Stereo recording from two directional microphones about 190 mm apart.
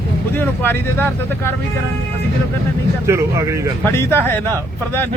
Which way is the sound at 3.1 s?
15° right (ahead or behind).